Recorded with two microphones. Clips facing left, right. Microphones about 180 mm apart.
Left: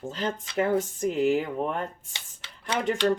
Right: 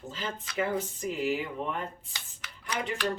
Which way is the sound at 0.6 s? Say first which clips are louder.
Left 6 dB; 45° left (ahead or behind).